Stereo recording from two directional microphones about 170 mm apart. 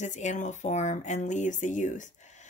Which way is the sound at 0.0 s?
45° left (ahead or behind).